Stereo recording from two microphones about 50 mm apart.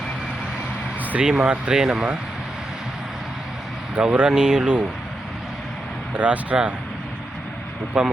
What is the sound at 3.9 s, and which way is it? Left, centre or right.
Speech, right.